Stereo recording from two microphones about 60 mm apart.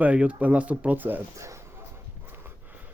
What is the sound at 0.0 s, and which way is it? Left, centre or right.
Speech, right.